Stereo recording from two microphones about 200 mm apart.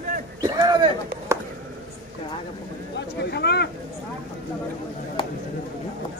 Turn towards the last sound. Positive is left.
turn(degrees=25)  # may be behind; listen again after turning